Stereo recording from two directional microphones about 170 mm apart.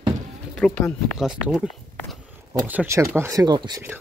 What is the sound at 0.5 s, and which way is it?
Speech, 5° left (ahead or behind).